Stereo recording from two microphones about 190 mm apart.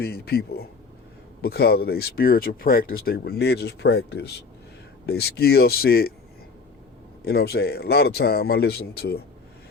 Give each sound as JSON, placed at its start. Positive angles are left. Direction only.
{"t": 0.0, "sound": "speech", "side_deg": 55}
{"t": 7.3, "sound": "speech", "side_deg": 55}